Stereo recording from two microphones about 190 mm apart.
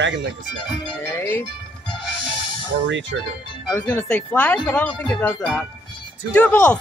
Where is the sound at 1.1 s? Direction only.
10° left (ahead or behind).